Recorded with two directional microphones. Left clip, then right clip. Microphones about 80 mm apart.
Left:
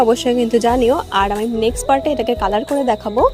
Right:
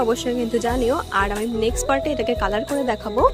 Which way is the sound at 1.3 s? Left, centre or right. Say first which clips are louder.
Left 5 dB; left.